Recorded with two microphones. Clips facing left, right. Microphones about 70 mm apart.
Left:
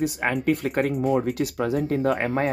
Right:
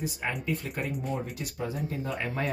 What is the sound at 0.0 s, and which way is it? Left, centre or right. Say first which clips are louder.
Speech: left 9 dB; left.